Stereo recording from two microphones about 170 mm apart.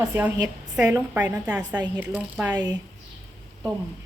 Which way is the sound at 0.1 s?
10° right (ahead or behind).